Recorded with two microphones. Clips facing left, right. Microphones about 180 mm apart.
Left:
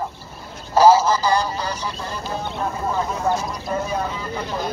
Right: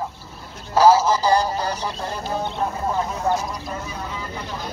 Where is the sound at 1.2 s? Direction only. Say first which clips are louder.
Right 1 dB; 35° right (ahead or behind).